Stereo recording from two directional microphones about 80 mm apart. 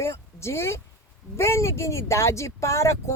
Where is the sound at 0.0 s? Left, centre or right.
Left.